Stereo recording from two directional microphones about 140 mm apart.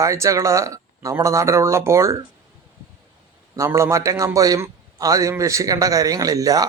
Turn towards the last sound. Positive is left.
turn(degrees=-25)  # may be behind; listen again after turning